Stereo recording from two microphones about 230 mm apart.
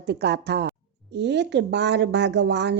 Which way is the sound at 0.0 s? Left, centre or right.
Right.